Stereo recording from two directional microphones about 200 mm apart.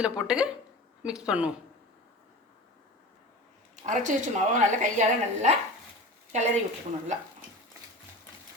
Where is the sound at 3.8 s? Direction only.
40° right (ahead or behind).